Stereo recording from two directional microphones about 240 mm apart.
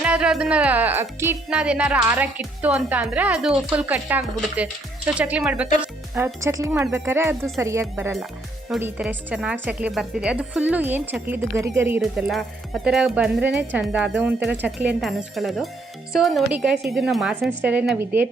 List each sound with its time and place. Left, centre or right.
0.0 s a woman's voice: centre